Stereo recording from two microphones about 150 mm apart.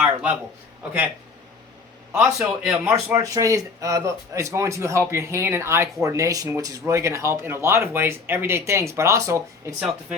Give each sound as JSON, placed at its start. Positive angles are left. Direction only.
{"t": 0.0, "sound": "a sound", "side_deg": -5}
{"t": 2.1, "sound": "speech", "side_deg": -10}
{"t": 3.2, "sound": "speech", "side_deg": -20}